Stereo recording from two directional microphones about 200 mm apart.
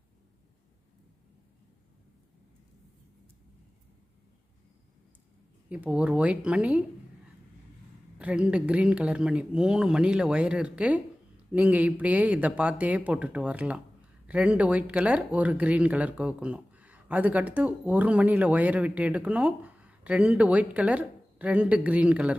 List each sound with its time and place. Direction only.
5.6 s speech: 5° right (ahead or behind)
8.2 s a woman's voice: 5° right (ahead or behind)